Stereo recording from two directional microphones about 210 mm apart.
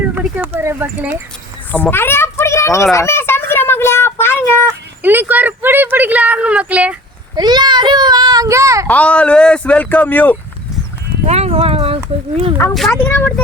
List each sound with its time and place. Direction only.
0.1 s speech: 10° right (ahead or behind)
1.7 s children playing: 10° left (ahead or behind)
5.0 s speech: 10° right (ahead or behind)
7.3 s a child's voice: 20° right (ahead or behind)
8.9 s speech: 5° left (ahead or behind)
11.3 s horse: 30° right (ahead or behind)
12.7 s speech: 5° left (ahead or behind)